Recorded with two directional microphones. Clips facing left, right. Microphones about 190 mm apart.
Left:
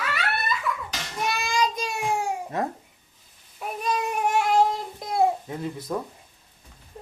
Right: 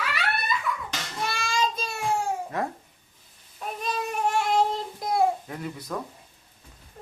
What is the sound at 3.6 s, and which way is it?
Baby cry, 10° left (ahead or behind).